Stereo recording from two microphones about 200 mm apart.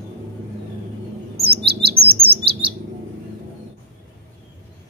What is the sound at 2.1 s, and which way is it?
Chirp, 30° right (ahead or behind).